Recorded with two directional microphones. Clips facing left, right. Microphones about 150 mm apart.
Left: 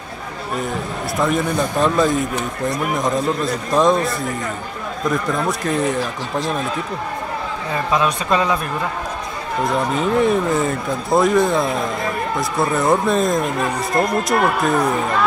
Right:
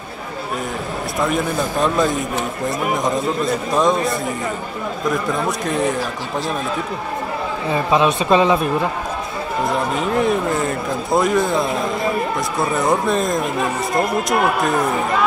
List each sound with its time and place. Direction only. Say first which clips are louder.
1.2 s a man's voice: left 1 dB; centre (ahead or behind)
7.7 s speech: right 3 dB; 25° right (ahead or behind)
9.7 s a man's voice: left 2 dB; centre (ahead or behind)